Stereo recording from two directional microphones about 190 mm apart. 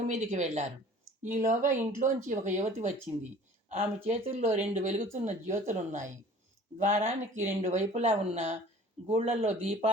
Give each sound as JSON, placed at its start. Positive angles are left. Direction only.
{"t": 0.1, "sound": "speech", "side_deg": -40}